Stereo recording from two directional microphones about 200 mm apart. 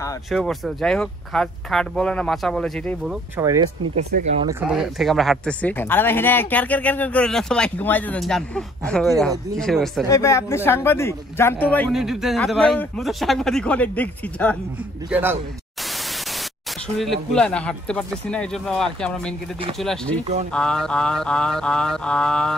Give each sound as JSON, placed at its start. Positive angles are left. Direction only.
{"t": 0.3, "sound": "speech", "side_deg": 0}
{"t": 3.3, "sound": "speech", "side_deg": -15}
{"t": 4.1, "sound": "speech", "side_deg": -45}
{"t": 4.5, "sound": "speech", "side_deg": -10}
{"t": 10.0, "sound": "speech", "side_deg": 15}
{"t": 11.9, "sound": "speech", "side_deg": 0}
{"t": 15.0, "sound": "speech", "side_deg": -10}
{"t": 17.0, "sound": "speech", "side_deg": 0}